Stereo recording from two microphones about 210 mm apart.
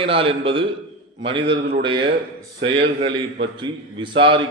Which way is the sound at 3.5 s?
20° right (ahead or behind).